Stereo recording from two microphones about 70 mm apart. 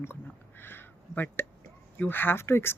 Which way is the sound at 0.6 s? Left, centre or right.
Left.